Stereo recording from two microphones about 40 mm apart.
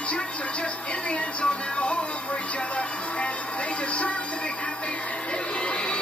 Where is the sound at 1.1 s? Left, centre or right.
Left.